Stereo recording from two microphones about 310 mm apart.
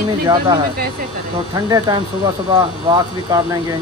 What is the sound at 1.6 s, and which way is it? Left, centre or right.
Speech, centre.